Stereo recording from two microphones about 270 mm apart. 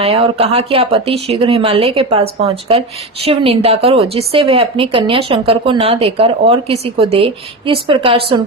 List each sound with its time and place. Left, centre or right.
0.0 s speech: right